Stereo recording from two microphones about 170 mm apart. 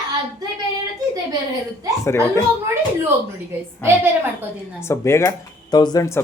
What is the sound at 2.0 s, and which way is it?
Speech, 15° left (ahead or behind).